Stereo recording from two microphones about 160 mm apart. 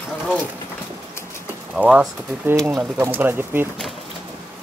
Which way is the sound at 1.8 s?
10° right (ahead or behind).